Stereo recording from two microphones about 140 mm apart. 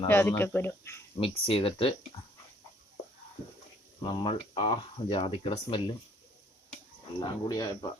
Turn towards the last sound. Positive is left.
turn(degrees=25)  # may be behind; listen again after turning